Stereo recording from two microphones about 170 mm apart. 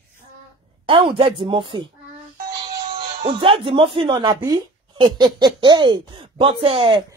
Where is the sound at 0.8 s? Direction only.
30° right (ahead or behind).